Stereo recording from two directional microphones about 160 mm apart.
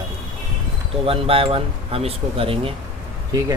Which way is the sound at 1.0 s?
35° right (ahead or behind).